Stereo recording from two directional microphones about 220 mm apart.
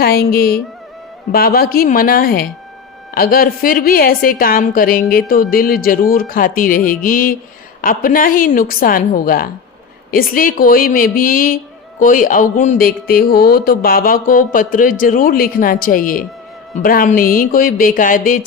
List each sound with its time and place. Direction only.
0.0 s speech: 45° left (ahead or behind)